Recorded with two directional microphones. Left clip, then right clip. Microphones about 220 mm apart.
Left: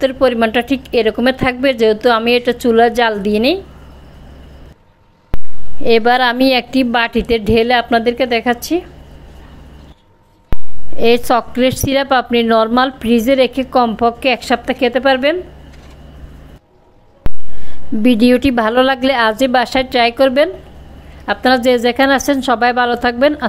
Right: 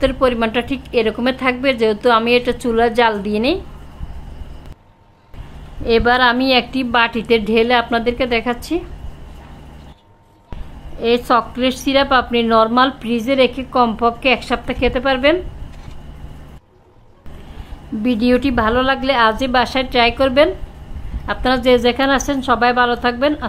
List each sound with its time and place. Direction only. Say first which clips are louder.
0.0 s a woman's voice: left 3 dB; 15° left (ahead or behind)
5.9 s a woman's voice: left 2 dB; 20° left (ahead or behind)
11.0 s a woman's voice: left 3 dB; 20° left (ahead or behind)
18.0 s a woman's voice: left 5 dB; 20° left (ahead or behind)